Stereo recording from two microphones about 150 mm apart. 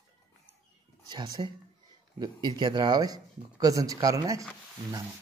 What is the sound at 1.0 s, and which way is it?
Speech, 30° right (ahead or behind).